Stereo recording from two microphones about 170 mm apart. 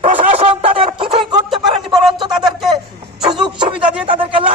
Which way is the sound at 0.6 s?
30° right (ahead or behind).